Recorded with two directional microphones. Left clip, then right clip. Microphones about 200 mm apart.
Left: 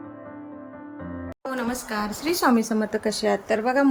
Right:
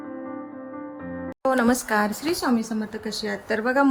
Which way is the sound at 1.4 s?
20° right (ahead or behind).